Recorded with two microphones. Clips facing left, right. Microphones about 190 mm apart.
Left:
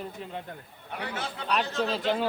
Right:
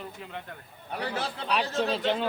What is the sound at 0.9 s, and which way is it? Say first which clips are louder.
Speech: right 3 dB; 35° right (ahead or behind).